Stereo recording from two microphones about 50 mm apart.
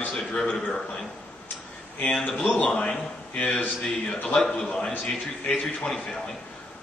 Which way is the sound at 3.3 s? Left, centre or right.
Left.